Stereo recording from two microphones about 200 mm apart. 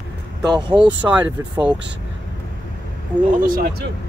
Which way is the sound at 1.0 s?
25° right (ahead or behind).